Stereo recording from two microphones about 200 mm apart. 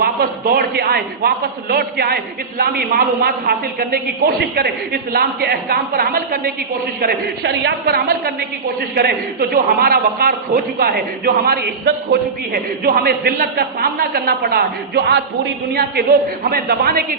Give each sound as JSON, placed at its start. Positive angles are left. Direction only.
{"t": 0.0, "sound": "a man's voice", "side_deg": -50}